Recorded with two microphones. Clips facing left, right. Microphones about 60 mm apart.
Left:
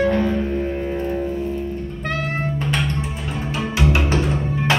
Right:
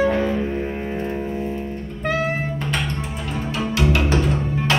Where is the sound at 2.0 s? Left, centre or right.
Centre.